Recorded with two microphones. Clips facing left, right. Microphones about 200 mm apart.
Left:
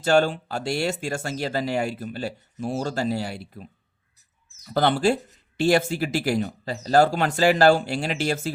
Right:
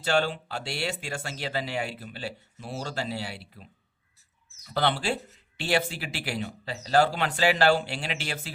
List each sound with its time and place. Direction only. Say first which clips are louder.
0.0 s speech: left 6 dB; 45° left (ahead or behind)